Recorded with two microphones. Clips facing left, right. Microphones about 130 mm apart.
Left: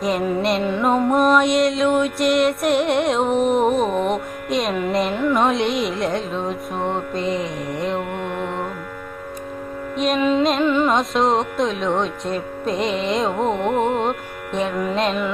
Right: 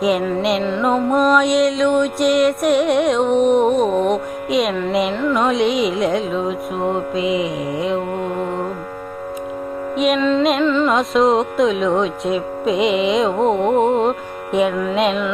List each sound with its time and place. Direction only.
0.6 s music: 15° left (ahead or behind)
0.9 s mantra: centre (ahead or behind)
5.1 s music: 15° left (ahead or behind)
5.4 s mantra: centre (ahead or behind)
8.2 s music: 40° right (ahead or behind)
10.2 s music: 10° left (ahead or behind)
10.8 s mantra: centre (ahead or behind)
13.7 s music: 35° right (ahead or behind)
14.0 s music: centre (ahead or behind)
14.9 s mantra: centre (ahead or behind)